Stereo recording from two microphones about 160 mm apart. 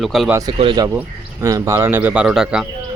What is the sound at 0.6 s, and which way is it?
Speech, 30° right (ahead or behind).